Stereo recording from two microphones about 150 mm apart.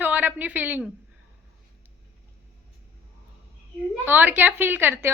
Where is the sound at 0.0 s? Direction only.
10° right (ahead or behind).